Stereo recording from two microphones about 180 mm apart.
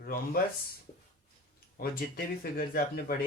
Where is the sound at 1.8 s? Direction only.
55° left (ahead or behind).